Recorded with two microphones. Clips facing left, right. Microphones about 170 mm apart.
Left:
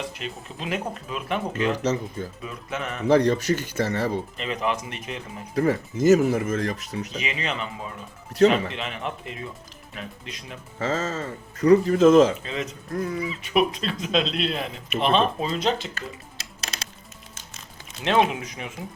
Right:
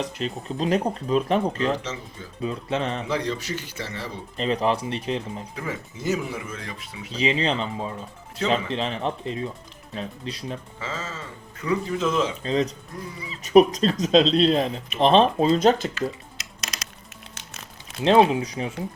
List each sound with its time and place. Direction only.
0.0 s speech: 35° right (ahead or behind)
1.8 s speech: 45° left (ahead or behind)
2.4 s speech: 30° right (ahead or behind)
3.1 s speech: 45° left (ahead or behind)
4.4 s speech: 30° right (ahead or behind)
5.5 s speech: 40° left (ahead or behind)
7.1 s speech: 30° right (ahead or behind)
10.8 s speech: 45° left (ahead or behind)
12.4 s speech: 35° right (ahead or behind)
16.4 s music: 30° left (ahead or behind)
18.0 s speech: 30° right (ahead or behind)